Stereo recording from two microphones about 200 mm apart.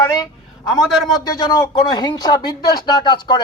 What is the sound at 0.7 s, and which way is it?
Speech, centre (ahead or behind).